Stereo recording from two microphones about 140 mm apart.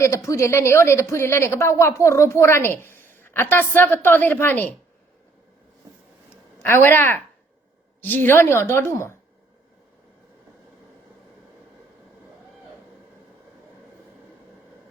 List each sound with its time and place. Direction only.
0.0 s a woman's voice: 20° left (ahead or behind)
6.6 s a woman's voice: 15° left (ahead or behind)